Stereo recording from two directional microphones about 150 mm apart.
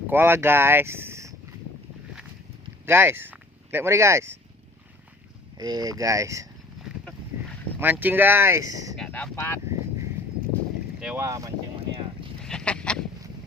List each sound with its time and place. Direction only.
0.1 s speech: 15° right (ahead or behind)
2.8 s speech: 15° right (ahead or behind)
5.5 s speech: 25° right (ahead or behind)
7.8 s speech: 10° right (ahead or behind)
9.0 s speech: 10° left (ahead or behind)
10.2 s clip-clop: 10° left (ahead or behind)
11.0 s speech: 15° right (ahead or behind)
12.4 s duck: 5° left (ahead or behind)